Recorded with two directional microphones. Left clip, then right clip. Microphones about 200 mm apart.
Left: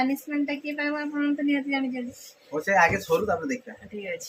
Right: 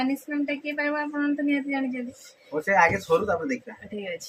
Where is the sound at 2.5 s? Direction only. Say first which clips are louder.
Even; 5° left (ahead or behind).